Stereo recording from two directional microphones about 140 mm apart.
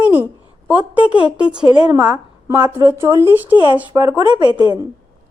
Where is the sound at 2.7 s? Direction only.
20° right (ahead or behind).